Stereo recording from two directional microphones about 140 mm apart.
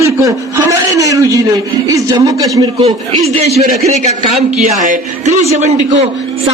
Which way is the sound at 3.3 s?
50° right (ahead or behind).